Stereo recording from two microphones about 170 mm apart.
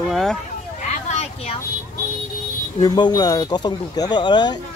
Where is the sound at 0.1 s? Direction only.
5° left (ahead or behind).